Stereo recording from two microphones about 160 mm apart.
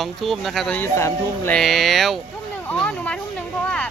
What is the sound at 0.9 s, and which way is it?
Speech, 15° left (ahead or behind).